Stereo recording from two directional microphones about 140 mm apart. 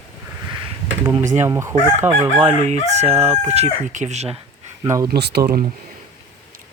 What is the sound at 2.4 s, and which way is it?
Crowing, 55° right (ahead or behind).